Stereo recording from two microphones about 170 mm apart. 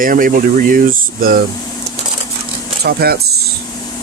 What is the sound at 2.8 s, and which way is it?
Speech, 65° right (ahead or behind).